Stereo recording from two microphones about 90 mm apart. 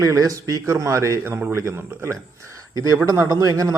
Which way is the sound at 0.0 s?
40° right (ahead or behind).